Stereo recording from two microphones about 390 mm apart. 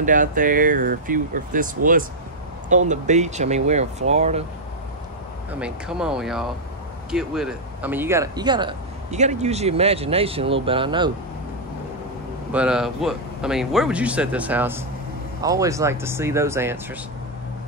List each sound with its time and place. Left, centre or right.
0.0 s speech: centre
2.7 s speech: centre
5.5 s speech: centre
12.5 s speech: centre